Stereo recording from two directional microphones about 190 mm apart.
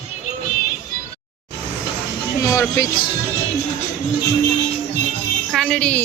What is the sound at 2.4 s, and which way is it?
Speech, 15° left (ahead or behind).